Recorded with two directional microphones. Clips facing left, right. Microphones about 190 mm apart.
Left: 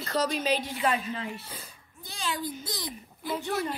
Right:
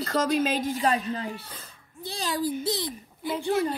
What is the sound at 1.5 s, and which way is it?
Speech, 10° left (ahead or behind).